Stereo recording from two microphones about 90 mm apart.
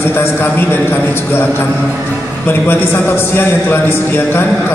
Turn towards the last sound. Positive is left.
turn(degrees=25)  # may be behind; listen again after turning